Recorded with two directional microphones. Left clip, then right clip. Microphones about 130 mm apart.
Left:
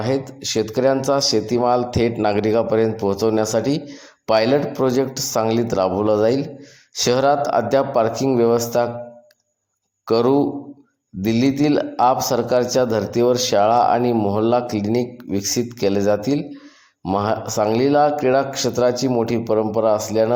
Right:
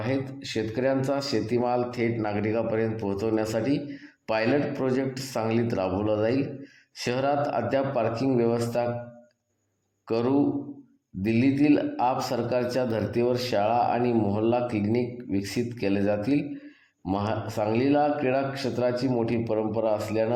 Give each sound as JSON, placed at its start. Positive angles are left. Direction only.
{"t": 0.0, "sound": "speech", "side_deg": 30}
{"t": 10.1, "sound": "a man's voice", "side_deg": 30}